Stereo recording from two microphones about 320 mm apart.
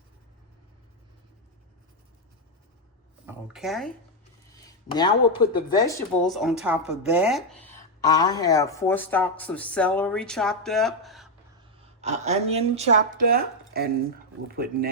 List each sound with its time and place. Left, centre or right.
3.2 s speech: centre
4.9 s speech: centre
6.2 s speech: centre
8.0 s speech: centre
11.8 s a woman's voice: right